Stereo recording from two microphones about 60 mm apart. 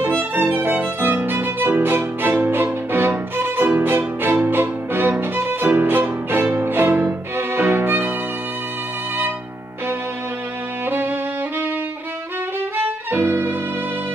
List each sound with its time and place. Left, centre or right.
0.2 s violin: right
4.5 s music: right
7.3 s violin: right
10.9 s violin: right
12.7 s violin: right